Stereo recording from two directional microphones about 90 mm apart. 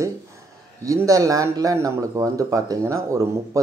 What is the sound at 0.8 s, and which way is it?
Speech, 40° right (ahead or behind).